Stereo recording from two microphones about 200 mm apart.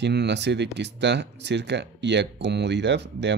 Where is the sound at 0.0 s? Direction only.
60° right (ahead or behind).